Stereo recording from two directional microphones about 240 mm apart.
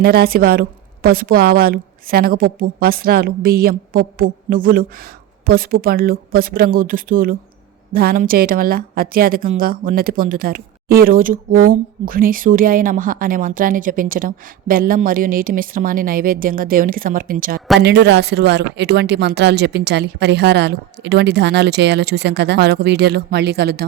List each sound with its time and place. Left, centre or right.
0.0 s a woman's voice: right